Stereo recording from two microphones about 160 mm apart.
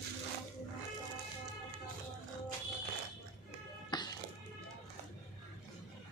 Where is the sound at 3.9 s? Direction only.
25° left (ahead or behind).